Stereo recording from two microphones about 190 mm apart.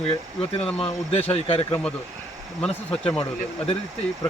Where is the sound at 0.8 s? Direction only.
30° left (ahead or behind).